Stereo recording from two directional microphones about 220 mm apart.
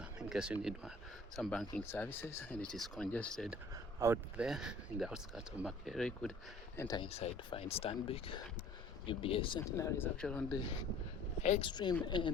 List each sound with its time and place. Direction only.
0.2 s speech: 5° right (ahead or behind)
6.7 s speech: 15° left (ahead or behind)
11.4 s speech: 30° left (ahead or behind)
11.7 s speech: 20° left (ahead or behind)